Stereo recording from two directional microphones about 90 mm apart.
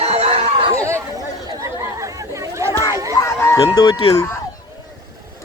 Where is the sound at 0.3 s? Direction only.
90° right.